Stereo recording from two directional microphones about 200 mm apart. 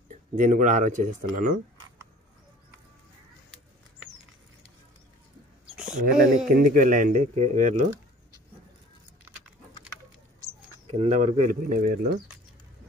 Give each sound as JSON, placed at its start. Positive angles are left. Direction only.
{"t": 0.1, "sound": "speech", "side_deg": -40}
{"t": 5.9, "sound": "speech", "side_deg": -45}
{"t": 10.9, "sound": "speech", "side_deg": -35}